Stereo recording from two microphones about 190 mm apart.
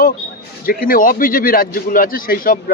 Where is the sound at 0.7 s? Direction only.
50° left (ahead or behind).